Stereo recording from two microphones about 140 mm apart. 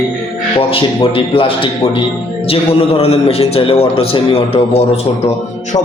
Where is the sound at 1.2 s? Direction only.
40° left (ahead or behind).